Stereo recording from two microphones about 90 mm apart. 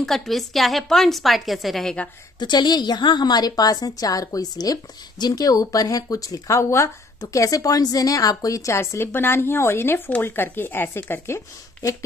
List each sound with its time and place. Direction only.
0.0 s a woman's voice: 5° left (ahead or behind)
2.4 s a woman's voice: 55° left (ahead or behind); by 12.0 s 35° left (ahead or behind)